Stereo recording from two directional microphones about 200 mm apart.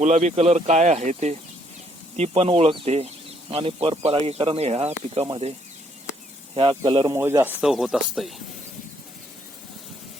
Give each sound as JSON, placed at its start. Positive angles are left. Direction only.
{"t": 0.0, "sound": "speech", "side_deg": -35}
{"t": 7.2, "sound": "speech", "side_deg": -10}